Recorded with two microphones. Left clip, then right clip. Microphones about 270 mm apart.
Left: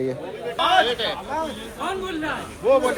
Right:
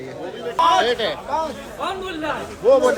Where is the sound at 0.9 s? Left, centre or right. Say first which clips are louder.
Right 3 dB; right.